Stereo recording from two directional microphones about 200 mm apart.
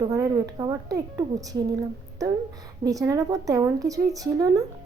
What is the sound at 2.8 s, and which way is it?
A woman's voice, 15° right (ahead or behind).